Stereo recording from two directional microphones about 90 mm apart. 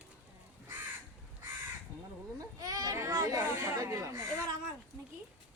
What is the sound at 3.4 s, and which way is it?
Chatter, 35° right (ahead or behind).